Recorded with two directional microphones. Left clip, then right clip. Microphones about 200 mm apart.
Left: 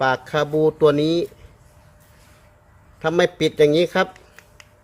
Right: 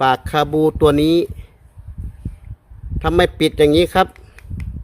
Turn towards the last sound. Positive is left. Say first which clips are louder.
# right 3 dB
turn(degrees=-40)  # may be behind; listen again after turning